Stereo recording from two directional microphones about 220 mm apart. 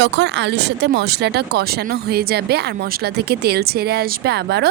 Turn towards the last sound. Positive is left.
turn(degrees=-45)  # may be behind; listen again after turning